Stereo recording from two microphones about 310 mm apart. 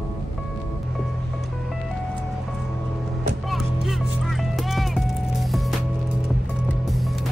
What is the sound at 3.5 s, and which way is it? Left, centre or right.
Music, centre.